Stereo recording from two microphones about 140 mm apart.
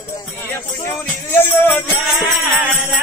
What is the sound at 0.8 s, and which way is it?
Music, 15° left (ahead or behind).